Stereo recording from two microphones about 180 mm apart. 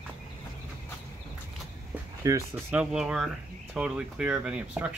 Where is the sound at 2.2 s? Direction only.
15° right (ahead or behind).